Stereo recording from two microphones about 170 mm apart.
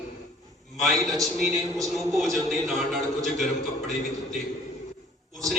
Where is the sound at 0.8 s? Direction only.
Centre (ahead or behind).